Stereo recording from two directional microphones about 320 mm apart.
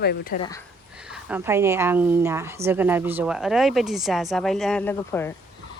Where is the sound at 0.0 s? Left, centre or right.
Left.